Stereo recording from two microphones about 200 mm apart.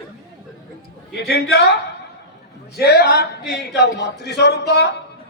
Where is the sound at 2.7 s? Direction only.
55° left (ahead or behind).